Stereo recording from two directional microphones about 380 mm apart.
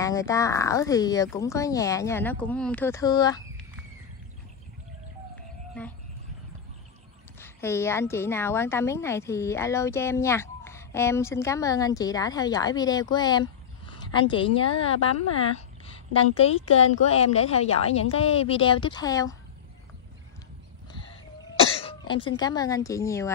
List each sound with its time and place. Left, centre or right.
0.0 s a woman's voice: centre
7.3 s a woman's voice: centre
21.8 s a woman's voice: centre